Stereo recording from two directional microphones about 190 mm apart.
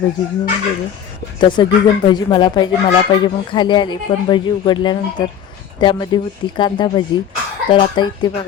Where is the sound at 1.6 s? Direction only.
20° left (ahead or behind).